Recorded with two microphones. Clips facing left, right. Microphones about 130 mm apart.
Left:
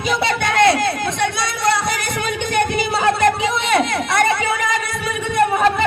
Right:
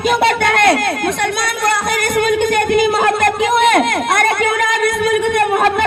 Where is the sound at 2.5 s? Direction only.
50° right (ahead or behind).